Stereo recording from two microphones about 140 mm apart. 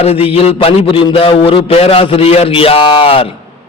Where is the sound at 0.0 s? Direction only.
45° left (ahead or behind).